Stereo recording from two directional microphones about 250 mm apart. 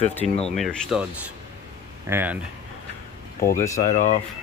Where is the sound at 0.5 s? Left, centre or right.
Centre.